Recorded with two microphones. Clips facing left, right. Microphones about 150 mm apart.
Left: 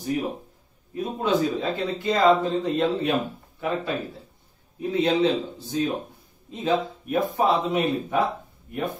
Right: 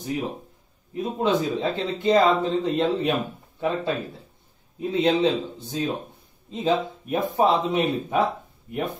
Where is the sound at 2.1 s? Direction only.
20° right (ahead or behind).